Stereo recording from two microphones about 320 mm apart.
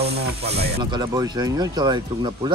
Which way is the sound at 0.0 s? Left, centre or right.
Right.